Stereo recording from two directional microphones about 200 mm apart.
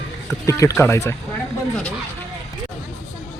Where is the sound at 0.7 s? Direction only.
10° left (ahead or behind).